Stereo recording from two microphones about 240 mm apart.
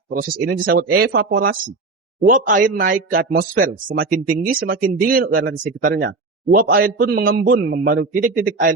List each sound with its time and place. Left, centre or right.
0.1 s a man's voice: right